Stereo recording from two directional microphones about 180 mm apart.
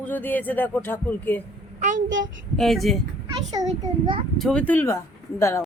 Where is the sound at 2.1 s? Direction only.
90° right.